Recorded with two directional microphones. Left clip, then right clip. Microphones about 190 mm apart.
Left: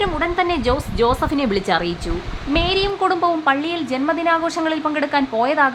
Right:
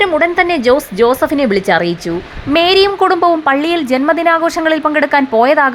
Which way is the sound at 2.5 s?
35° right (ahead or behind).